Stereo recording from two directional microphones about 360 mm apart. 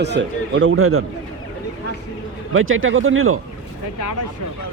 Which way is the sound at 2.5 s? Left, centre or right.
Right.